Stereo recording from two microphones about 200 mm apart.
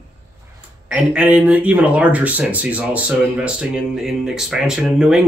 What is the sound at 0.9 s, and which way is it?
Speech, 5° right (ahead or behind).